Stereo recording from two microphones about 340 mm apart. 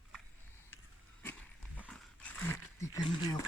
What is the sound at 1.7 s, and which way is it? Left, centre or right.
Dog, centre.